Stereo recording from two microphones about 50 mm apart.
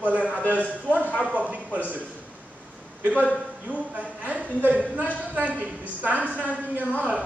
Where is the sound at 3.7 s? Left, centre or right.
Right.